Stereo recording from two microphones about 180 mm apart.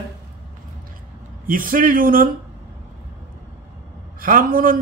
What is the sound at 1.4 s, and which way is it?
Speech, 50° right (ahead or behind).